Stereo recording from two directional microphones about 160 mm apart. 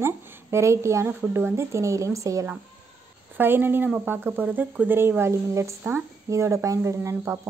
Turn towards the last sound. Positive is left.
turn(degrees=-15)  # may be behind; listen again after turning